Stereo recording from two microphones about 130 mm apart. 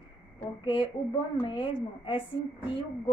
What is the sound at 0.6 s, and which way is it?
A woman's voice, 35° left (ahead or behind).